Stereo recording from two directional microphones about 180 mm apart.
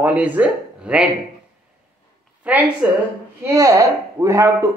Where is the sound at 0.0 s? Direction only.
10° right (ahead or behind).